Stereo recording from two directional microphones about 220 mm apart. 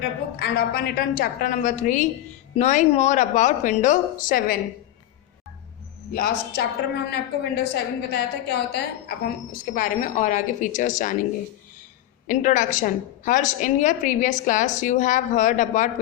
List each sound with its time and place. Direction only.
0.3 s a woman's voice: 40° left (ahead or behind)
6.1 s a woman's voice: 45° left (ahead or behind)
9.7 s a woman's voice: 35° left (ahead or behind)
12.3 s a woman's voice: 35° left (ahead or behind)